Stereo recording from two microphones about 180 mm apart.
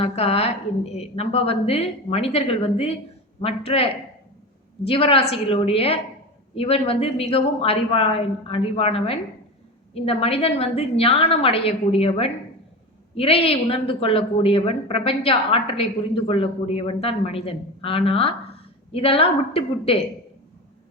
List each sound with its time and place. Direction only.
0.0 s a woman's voice: 35° left (ahead or behind)
4.9 s a woman's voice: 30° left (ahead or behind)